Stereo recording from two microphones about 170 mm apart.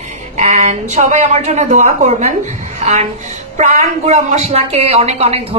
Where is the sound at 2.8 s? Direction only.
40° right (ahead or behind).